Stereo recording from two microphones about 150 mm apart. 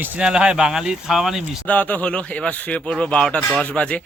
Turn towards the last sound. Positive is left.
turn(degrees=10)  # may be behind; listen again after turning